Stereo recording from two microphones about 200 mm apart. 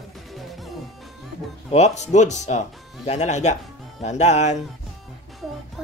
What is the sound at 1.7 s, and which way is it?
Speech, 35° left (ahead or behind).